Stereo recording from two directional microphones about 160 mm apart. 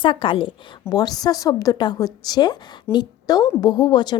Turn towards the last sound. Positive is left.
turn(degrees=25)  # may be behind; listen again after turning